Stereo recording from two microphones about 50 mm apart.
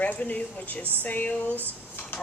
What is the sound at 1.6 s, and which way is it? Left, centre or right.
Dishes, left.